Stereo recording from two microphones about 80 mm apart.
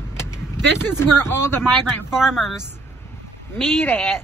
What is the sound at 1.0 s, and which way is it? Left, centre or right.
Speech, left.